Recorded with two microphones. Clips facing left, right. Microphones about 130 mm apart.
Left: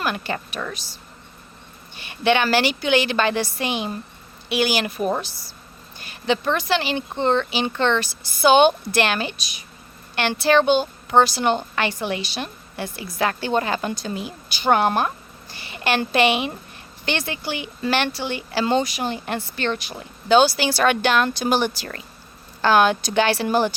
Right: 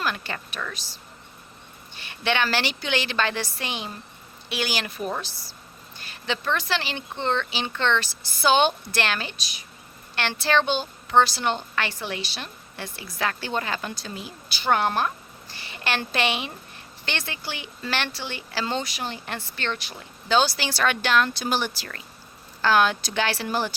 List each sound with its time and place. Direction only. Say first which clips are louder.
0.0 s speech: left 4 dB; 15° left (ahead or behind)
2.0 s speech: left 6 dB; 15° left (ahead or behind)
6.0 s speech: left 8 dB; 15° left (ahead or behind)